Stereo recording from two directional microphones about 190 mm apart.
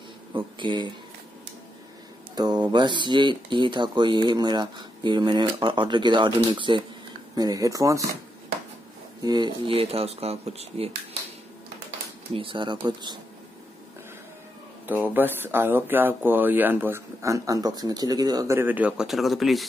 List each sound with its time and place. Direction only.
0.6 s speech: 25° right (ahead or behind)
2.3 s speech: 20° right (ahead or behind)
9.2 s speech: 20° right (ahead or behind)
12.4 s speech: 25° right (ahead or behind)
14.9 s speech: 10° right (ahead or behind)